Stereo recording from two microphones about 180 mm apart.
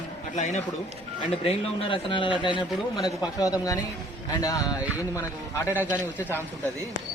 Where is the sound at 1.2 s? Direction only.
30° left (ahead or behind).